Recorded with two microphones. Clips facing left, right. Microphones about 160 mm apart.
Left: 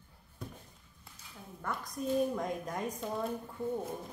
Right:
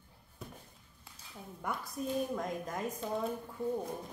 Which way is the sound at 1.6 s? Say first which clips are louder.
Left 1 dB; 5° right (ahead or behind).